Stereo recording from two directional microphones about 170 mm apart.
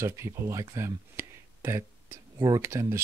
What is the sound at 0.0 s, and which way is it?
Speech, 15° right (ahead or behind).